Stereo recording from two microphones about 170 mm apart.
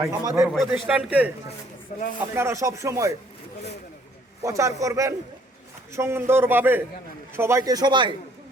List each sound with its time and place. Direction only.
0.0 s a man's voice: 20° right (ahead or behind)
0.4 s a man's voice: 5° right (ahead or behind)
2.3 s a man's voice: 15° right (ahead or behind)
4.4 s a man's voice: 20° right (ahead or behind)